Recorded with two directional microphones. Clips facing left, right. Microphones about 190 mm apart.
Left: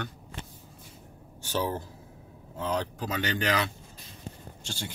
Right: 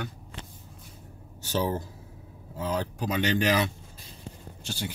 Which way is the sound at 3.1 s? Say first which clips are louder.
Right 4 dB; 20° right (ahead or behind).